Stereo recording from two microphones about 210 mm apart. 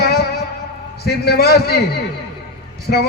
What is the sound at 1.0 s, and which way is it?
Speech, 50° left (ahead or behind).